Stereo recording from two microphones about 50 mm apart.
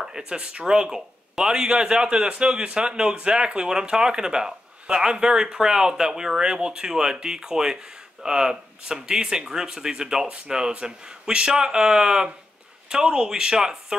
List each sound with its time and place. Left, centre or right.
0.0 s speech: centre